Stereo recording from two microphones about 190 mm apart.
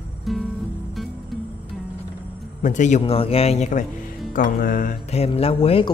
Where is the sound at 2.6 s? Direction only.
40° left (ahead or behind).